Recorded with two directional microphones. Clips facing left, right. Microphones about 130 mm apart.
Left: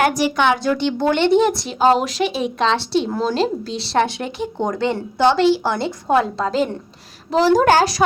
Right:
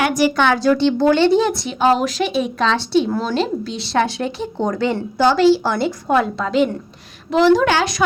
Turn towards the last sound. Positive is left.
turn(degrees=40)  # may be behind; listen again after turning